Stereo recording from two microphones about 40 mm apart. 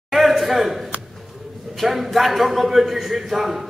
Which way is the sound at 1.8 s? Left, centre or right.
Centre.